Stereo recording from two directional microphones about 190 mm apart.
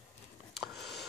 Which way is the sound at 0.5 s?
Centre (ahead or behind).